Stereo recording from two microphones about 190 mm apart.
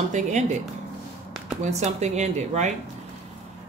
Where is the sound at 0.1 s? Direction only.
40° right (ahead or behind).